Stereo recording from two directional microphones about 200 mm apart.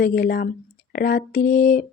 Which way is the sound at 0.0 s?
50° left (ahead or behind).